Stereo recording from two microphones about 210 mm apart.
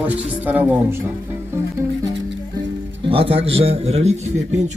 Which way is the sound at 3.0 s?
25° right (ahead or behind).